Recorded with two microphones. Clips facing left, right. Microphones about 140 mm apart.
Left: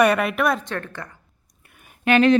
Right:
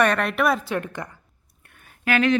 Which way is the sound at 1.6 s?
10° left (ahead or behind).